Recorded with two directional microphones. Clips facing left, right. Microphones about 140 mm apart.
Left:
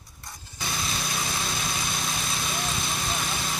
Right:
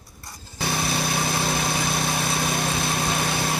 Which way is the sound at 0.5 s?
65° right (ahead or behind).